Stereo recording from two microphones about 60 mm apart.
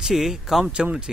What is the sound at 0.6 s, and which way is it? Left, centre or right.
Speech, centre.